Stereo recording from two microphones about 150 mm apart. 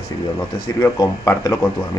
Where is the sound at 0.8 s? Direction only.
25° left (ahead or behind).